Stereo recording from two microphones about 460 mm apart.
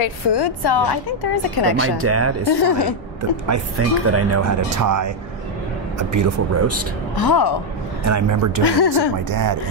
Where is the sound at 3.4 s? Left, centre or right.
Right.